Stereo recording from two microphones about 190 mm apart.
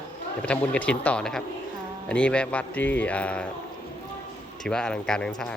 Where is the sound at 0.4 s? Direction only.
5° left (ahead or behind).